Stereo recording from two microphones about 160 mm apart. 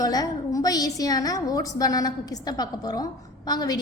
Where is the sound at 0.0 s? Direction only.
20° left (ahead or behind).